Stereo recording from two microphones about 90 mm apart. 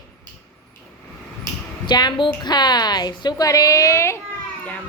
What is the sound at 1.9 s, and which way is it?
A woman's voice, 55° left (ahead or behind).